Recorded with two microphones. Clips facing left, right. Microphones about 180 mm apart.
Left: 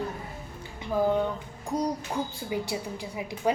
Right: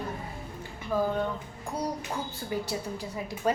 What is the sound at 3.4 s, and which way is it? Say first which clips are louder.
Speech: left 1 dB; 10° left (ahead or behind).